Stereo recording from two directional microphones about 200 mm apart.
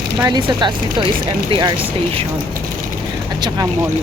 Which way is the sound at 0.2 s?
20° right (ahead or behind).